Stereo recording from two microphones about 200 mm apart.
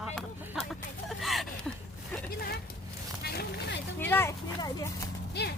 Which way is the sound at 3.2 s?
55° left (ahead or behind).